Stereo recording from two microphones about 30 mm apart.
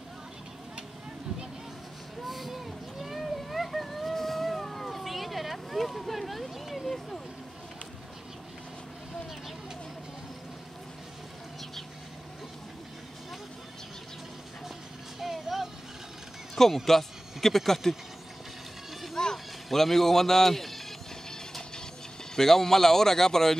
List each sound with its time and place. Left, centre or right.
2.2 s vehicle: centre
15.1 s vehicle: centre
16.7 s speech: centre
19.3 s speech: centre
21.3 s vehicle: centre
22.3 s speech: centre